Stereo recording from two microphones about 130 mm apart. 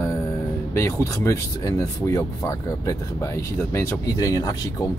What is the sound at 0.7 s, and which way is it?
Speech, 20° left (ahead or behind).